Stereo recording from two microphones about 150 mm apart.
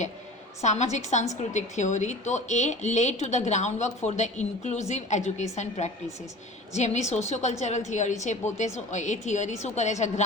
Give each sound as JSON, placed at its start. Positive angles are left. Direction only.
{"t": 0.6, "sound": "speech", "side_deg": 50}